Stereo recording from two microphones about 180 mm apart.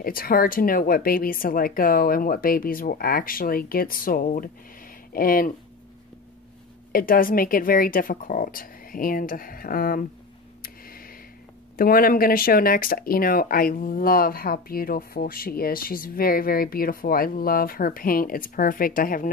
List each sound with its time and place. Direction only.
0.0 s speech: 55° left (ahead or behind)
6.9 s speech: 50° left (ahead or behind)
10.6 s a sound: 55° left (ahead or behind)
11.7 s speech: 55° left (ahead or behind)